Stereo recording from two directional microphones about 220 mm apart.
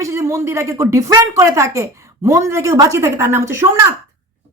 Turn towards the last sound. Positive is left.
turn(degrees=-15)  # may be behind; listen again after turning